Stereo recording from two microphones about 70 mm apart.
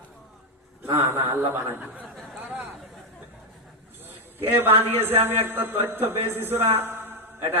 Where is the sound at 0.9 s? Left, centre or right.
Right.